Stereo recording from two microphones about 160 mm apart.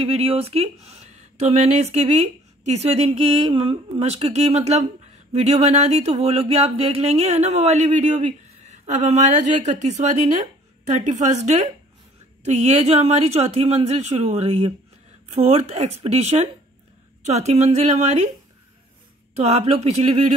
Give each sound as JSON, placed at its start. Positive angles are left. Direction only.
{"t": 0.0, "sound": "speech", "side_deg": -35}
{"t": 19.3, "sound": "speech", "side_deg": -40}